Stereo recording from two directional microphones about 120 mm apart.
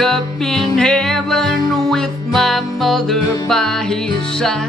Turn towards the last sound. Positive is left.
turn(degrees=5)  # may be behind; listen again after turning